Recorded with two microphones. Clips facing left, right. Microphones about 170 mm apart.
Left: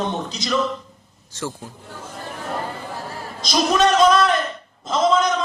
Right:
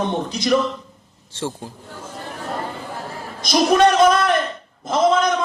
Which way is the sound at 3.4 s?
55° right (ahead or behind).